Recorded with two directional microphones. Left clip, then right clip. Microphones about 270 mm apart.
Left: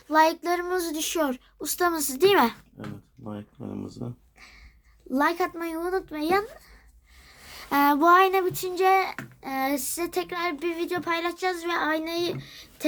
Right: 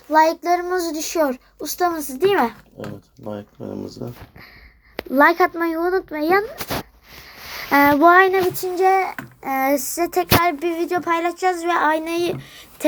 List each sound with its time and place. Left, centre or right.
0.1 s child singing: centre
0.4 s a child's voice: centre
0.9 s a woman's voice: centre
4.0 s a woman's voice: left
5.1 s a child's voice: centre
7.3 s a sound: centre
8.6 s a child's voice: centre
9.1 s a sound: centre
9.9 s a child's voice: centre
11.1 s a child's voice: centre